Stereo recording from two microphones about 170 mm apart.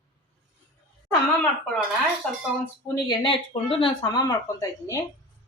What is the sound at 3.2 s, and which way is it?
Speech, 30° left (ahead or behind).